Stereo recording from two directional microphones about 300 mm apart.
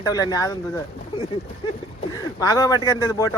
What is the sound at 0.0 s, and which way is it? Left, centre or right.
Speech, centre.